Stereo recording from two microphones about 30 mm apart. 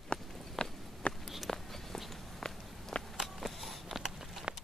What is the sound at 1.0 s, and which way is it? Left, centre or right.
Walk, left.